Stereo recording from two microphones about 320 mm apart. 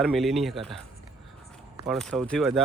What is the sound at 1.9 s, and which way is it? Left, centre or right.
Speech, centre.